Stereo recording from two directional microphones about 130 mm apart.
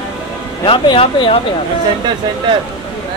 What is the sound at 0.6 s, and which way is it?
Speech, 40° left (ahead or behind).